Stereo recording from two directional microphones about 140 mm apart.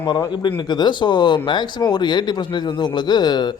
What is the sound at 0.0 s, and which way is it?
A man's voice, 30° left (ahead or behind).